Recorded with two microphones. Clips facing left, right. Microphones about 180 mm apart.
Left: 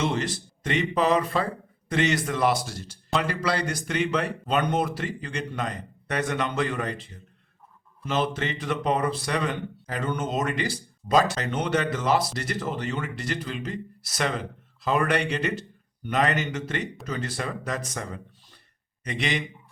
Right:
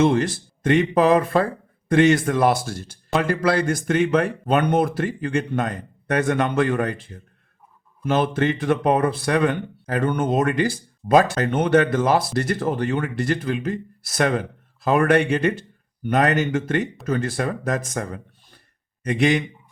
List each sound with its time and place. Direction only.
0.0 s speech: 55° right (ahead or behind)